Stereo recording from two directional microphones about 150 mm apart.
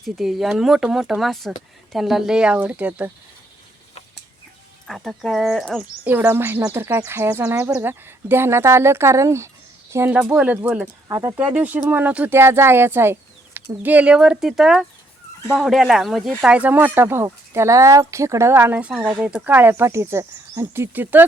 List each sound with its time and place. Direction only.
0.0 s speech: centre (ahead or behind)
4.9 s speech: centre (ahead or behind)
6.1 s speech: 15° right (ahead or behind)
11.1 s speech: 20° right (ahead or behind)
11.3 s speech: 10° right (ahead or behind)